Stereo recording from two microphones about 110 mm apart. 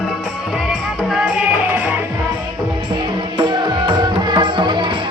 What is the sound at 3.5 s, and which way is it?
Music, 45° right (ahead or behind).